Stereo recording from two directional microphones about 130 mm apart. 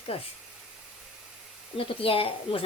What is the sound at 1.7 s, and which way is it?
Speech, 45° left (ahead or behind).